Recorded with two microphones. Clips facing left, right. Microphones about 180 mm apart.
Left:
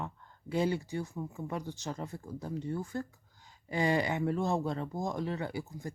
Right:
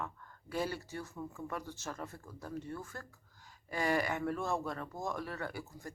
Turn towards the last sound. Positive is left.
turn(degrees=15)  # may be behind; listen again after turning